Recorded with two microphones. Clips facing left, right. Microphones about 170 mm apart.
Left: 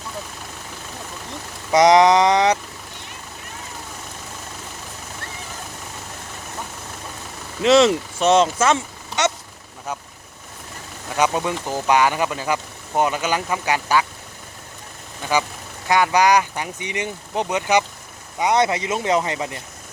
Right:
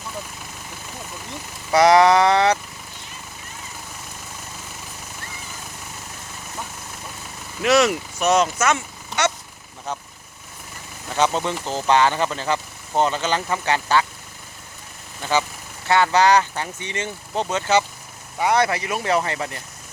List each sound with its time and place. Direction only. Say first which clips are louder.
1.7 s speech: left 1 dB; 20° left (ahead or behind)
7.6 s speech: left 3 dB; 25° left (ahead or behind)
11.2 s speech: left 1 dB; 10° left (ahead or behind)
15.2 s speech: even; 10° left (ahead or behind)